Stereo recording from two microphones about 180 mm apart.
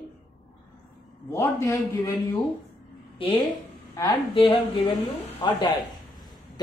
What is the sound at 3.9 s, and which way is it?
A man's voice, 25° left (ahead or behind).